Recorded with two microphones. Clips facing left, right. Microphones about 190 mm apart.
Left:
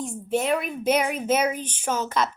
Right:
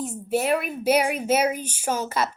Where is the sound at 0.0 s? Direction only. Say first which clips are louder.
Right 1 dB; 5° right (ahead or behind).